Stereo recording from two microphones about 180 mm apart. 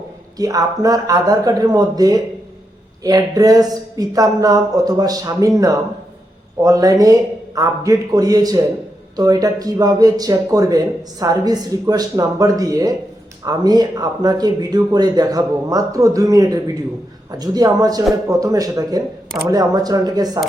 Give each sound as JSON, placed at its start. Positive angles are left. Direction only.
{"t": 0.3, "sound": "speech", "side_deg": -20}